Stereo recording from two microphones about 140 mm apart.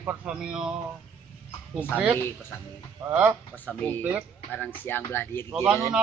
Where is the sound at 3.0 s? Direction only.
20° right (ahead or behind).